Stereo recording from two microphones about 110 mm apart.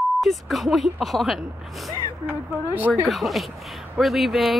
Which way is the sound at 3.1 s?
Centre (ahead or behind).